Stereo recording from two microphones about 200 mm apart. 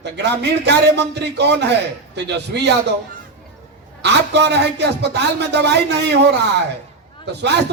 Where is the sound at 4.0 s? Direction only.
60° right (ahead or behind).